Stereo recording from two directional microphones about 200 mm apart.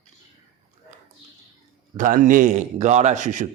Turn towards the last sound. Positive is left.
turn(degrees=-40)  # may be behind; listen again after turning